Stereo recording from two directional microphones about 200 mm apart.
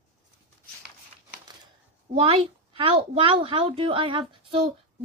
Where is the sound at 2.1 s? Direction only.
25° right (ahead or behind).